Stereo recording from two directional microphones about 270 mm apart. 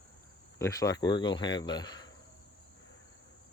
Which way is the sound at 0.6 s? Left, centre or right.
Centre.